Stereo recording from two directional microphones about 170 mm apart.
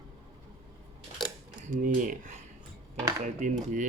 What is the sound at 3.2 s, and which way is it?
Cutlery, 45° right (ahead or behind).